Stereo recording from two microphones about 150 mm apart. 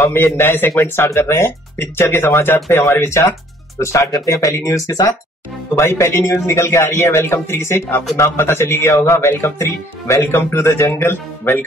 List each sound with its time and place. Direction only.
0.0 s a man's voice: 15° left (ahead or behind)